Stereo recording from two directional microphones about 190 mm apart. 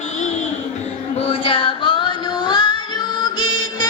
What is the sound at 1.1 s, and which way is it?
Child singing, 30° left (ahead or behind).